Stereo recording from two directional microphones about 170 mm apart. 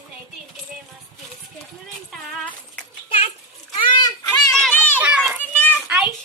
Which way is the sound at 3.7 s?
30° left (ahead or behind).